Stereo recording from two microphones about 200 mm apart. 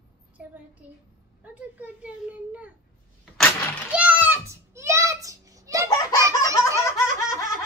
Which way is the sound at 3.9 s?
5° right (ahead or behind).